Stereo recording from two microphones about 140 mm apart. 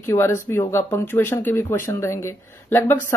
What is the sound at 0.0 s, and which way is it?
Speech, 20° left (ahead or behind).